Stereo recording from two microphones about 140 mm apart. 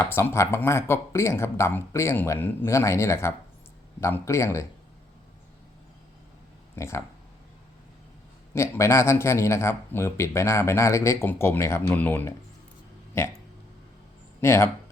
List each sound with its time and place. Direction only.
0.0 s speech: 15° left (ahead or behind)
6.7 s speech: 20° left (ahead or behind)
8.5 s speech: 20° left (ahead or behind)
14.4 s speech: 20° left (ahead or behind)